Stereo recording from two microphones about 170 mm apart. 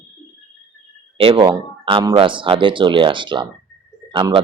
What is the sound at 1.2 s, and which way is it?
Speech, 30° right (ahead or behind).